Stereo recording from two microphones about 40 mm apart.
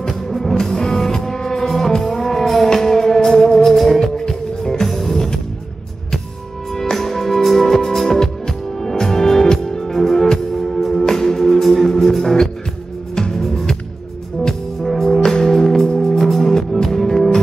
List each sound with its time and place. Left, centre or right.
0.0 s music: centre
3.5 s music: centre
6.7 s music: centre
13.1 s music: centre
14.8 s music: centre